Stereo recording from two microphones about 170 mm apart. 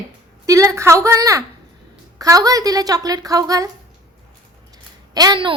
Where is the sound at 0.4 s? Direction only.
20° right (ahead or behind).